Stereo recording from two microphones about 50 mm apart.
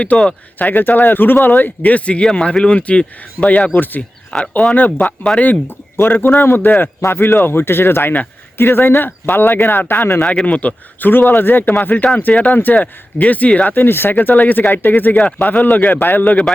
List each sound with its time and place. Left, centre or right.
0.0 s speech: left
0.6 s speech: left
4.7 s speech: left
7.1 s speech: left
10.4 s speech: left
11.1 s speech: left
13.7 s speech: left